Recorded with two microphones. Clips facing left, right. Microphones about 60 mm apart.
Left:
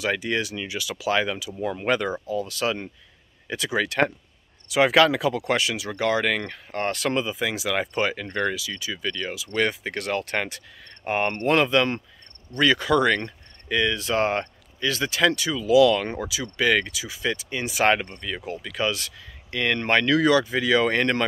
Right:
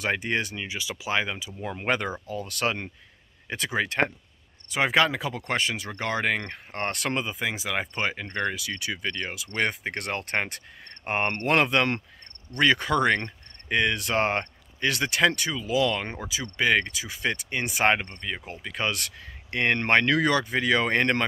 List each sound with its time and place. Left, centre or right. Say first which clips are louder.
0.2 s speech: left 2 dB; right
0.6 s speech: left 2 dB; right
2.2 s speech: left 3 dB; right; by 5.4 s centre
5.6 s speech: left 4 dB; right
7.9 s speech: left 4 dB; centre
8.5 s speech: even; right
11.1 s speech: left 3 dB; right
12.4 s cricket: left 2 dB; right
15.2 s speech: left 2 dB; right
15.5 s speech: left 8 dB; right
17.0 s speech: left 1 dB; right
18.2 s speech: left 3 dB; right
18.9 s speech: left 2 dB; right